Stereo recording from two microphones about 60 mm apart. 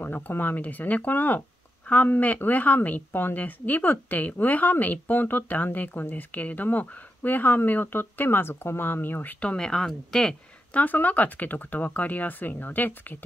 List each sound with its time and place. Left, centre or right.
0.0 s a woman's voice: left
9.4 s speech: centre
10.7 s speech: left